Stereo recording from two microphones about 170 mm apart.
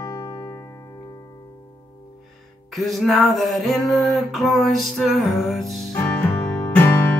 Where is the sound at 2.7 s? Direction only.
Centre (ahead or behind).